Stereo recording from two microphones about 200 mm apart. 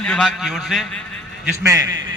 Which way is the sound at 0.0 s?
5° left (ahead or behind).